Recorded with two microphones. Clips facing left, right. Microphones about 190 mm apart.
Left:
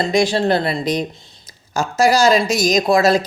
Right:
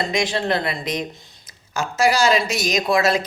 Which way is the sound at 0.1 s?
35° left (ahead or behind).